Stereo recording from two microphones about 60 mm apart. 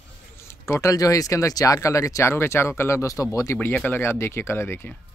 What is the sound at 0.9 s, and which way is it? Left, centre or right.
Speech, left.